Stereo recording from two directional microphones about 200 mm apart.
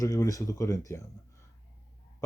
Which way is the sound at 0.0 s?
15° left (ahead or behind).